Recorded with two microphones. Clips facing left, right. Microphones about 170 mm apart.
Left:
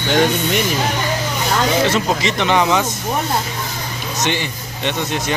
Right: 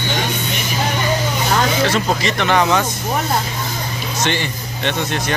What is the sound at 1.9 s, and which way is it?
Speech, 20° left (ahead or behind).